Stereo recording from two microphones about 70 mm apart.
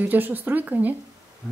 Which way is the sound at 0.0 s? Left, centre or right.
Right.